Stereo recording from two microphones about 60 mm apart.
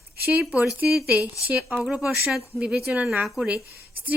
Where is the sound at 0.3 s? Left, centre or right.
Right; by 2.9 s centre.